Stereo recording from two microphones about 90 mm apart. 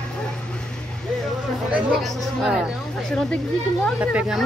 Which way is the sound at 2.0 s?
Centre (ahead or behind).